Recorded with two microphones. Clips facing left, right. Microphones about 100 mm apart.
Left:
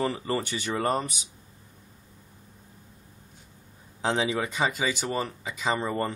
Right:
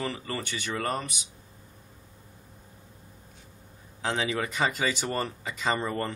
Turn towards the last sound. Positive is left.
turn(degrees=15)  # may be behind; listen again after turning